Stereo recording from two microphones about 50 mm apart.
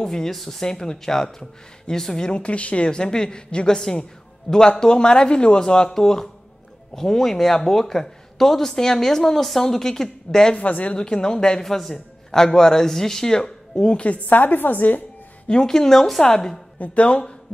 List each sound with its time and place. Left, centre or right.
0.0 s a man's voice: centre
10.5 s speech: left
11.0 s a man's voice: centre; by 15.0 s left
15.4 s a man's voice: centre
16.7 s speech: left